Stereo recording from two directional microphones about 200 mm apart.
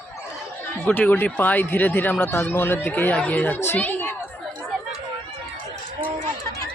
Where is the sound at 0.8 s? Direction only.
10° left (ahead or behind).